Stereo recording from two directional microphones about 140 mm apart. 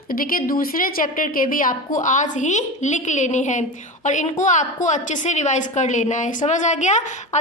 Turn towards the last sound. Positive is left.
turn(degrees=60)  # may be behind; listen again after turning